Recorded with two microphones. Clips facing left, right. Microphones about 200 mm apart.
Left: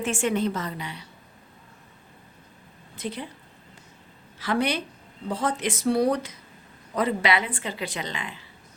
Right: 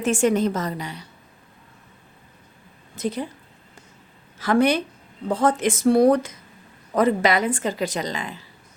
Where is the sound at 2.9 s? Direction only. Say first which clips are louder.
Right 7 dB; 45° right (ahead or behind).